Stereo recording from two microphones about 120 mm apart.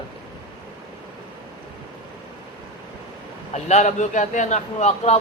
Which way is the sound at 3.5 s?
75° left (ahead or behind).